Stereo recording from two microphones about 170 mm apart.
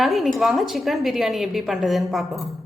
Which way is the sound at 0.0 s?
Centre (ahead or behind).